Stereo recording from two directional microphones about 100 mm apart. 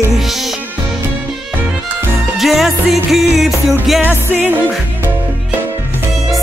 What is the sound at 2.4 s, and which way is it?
Music, centre (ahead or behind).